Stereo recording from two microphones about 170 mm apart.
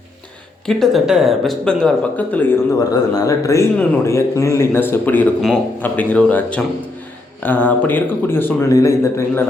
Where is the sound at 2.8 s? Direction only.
20° left (ahead or behind).